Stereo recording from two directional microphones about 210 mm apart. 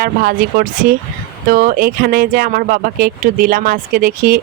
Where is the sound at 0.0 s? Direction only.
45° right (ahead or behind).